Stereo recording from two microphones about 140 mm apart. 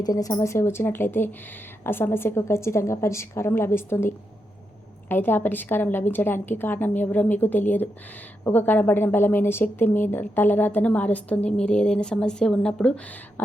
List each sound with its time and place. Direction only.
0.0 s a woman's voice: 25° left (ahead or behind); by 12.9 s 5° left (ahead or behind)